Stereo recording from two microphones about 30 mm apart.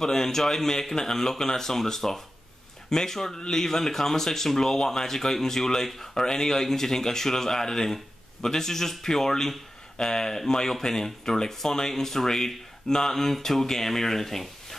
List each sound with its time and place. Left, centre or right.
0.0 s speech: centre